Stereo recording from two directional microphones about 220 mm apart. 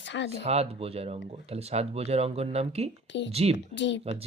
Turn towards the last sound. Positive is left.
turn(degrees=55)  # may be behind; listen again after turning